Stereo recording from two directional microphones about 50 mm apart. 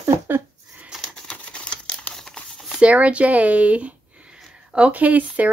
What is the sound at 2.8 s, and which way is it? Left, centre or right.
Speech, right.